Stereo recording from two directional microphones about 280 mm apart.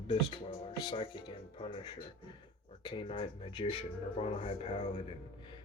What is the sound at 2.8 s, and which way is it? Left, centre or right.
Speech, centre.